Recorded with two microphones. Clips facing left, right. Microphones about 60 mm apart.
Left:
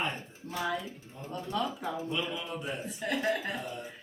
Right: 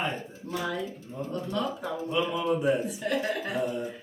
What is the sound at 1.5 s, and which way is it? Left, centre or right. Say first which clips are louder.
Speech: right 1 dB; centre.